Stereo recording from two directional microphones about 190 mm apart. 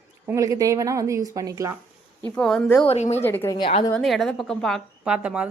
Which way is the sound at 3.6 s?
25° left (ahead or behind).